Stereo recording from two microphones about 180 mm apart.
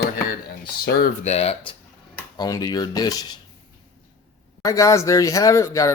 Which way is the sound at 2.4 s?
20° left (ahead or behind).